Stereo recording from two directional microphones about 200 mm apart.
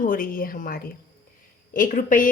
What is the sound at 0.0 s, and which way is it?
A woman's voice, 45° left (ahead or behind).